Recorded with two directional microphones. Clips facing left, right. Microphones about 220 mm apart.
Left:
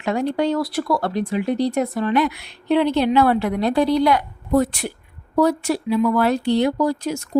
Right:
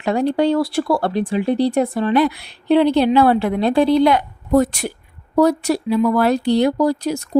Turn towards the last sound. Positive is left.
turn(degrees=-35)  # may be behind; listen again after turning